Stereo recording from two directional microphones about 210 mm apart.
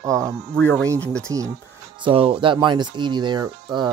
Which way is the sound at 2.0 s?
25° right (ahead or behind).